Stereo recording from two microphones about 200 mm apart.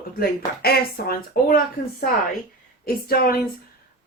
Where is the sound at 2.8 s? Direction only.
50° left (ahead or behind).